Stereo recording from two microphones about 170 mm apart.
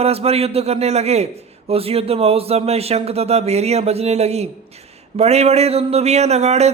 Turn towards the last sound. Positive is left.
turn(degrees=-40)  # may be behind; listen again after turning